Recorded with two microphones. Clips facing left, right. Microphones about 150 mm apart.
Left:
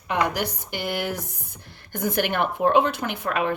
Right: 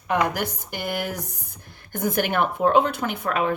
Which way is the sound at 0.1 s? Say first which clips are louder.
Right 1 dB; 45° right (ahead or behind).